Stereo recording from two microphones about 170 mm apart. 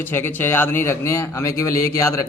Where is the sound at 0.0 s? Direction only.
10° left (ahead or behind).